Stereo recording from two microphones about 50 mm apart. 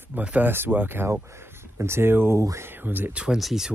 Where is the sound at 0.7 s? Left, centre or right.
Right.